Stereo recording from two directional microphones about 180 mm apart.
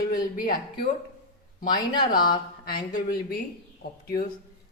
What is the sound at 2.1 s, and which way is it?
Speech, 55° left (ahead or behind).